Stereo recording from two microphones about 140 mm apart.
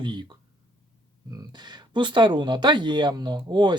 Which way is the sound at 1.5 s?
30° right (ahead or behind).